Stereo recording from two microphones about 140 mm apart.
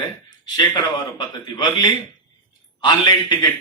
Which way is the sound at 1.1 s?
30° left (ahead or behind).